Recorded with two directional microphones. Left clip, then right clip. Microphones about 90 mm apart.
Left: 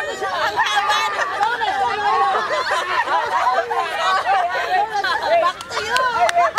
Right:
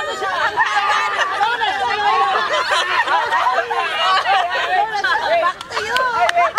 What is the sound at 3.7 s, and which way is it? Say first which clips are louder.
Chatter: right 2 dB; 20° right (ahead or behind).